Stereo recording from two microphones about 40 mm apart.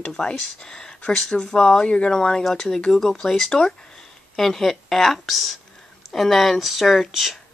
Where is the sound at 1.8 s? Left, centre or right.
Left.